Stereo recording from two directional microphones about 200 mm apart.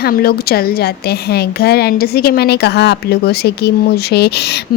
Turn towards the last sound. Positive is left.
turn(degrees=55)  # may be behind; listen again after turning